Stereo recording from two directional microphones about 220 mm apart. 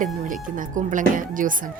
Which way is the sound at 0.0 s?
35° right (ahead or behind).